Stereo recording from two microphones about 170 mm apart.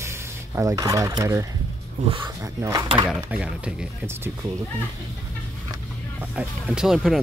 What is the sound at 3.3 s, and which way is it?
Speech, 5° right (ahead or behind).